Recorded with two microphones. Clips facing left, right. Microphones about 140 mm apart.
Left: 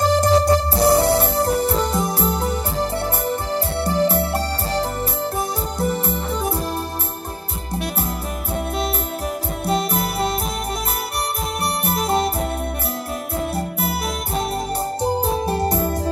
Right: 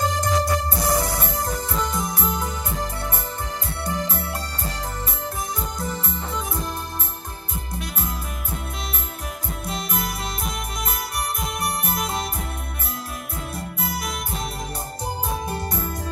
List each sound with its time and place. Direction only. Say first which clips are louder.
0.0 s music: left 7 dB; 30° left (ahead or behind)
9.7 s music: left 7 dB; 30° left (ahead or behind)
11.6 s music: left 5 dB; 30° left (ahead or behind)
13.7 s music: left 5 dB; 30° left (ahead or behind)
15.7 s music: left 8 dB; 35° left (ahead or behind)